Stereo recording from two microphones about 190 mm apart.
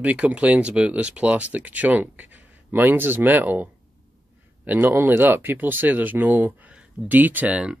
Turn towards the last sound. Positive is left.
turn(degrees=-5)  # may be behind; listen again after turning